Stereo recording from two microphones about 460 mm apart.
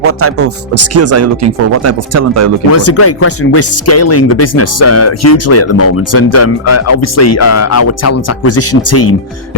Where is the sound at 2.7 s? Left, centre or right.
Left.